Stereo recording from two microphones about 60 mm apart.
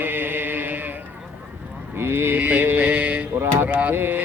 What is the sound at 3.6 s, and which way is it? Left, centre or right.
Speech, right.